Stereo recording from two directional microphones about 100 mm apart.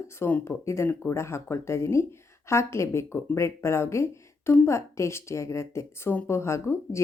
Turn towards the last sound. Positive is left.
turn(degrees=30)  # may be behind; listen again after turning